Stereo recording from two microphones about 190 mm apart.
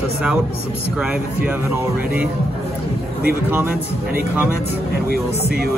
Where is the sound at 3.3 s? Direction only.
10° right (ahead or behind).